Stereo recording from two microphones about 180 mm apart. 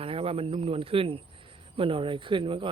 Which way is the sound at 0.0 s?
30° right (ahead or behind).